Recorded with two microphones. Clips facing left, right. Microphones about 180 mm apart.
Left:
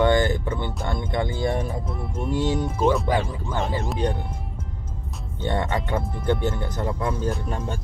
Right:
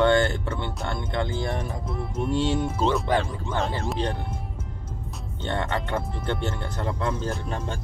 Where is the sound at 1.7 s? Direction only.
5° left (ahead or behind).